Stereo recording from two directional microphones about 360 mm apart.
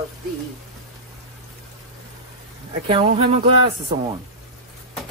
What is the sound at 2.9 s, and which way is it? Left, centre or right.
Speech, centre.